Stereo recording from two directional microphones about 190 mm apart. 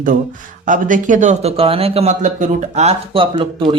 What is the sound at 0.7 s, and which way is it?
A man's voice, 45° right (ahead or behind).